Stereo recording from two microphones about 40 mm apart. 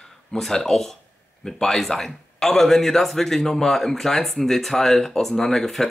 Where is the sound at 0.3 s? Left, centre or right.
Centre.